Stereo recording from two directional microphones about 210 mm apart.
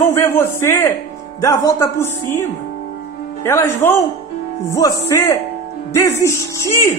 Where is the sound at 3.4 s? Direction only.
15° left (ahead or behind).